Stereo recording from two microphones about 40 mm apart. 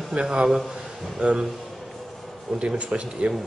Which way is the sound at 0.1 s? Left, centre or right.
Right.